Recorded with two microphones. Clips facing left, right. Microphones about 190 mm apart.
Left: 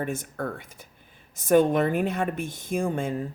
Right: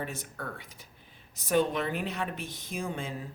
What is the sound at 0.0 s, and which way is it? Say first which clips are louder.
Speech: left 8 dB; 50° left (ahead or behind).